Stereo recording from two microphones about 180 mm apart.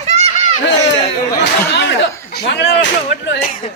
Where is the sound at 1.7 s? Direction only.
75° left (ahead or behind).